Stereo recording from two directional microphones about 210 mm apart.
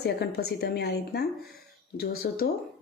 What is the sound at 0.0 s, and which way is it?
A woman's voice, 50° left (ahead or behind).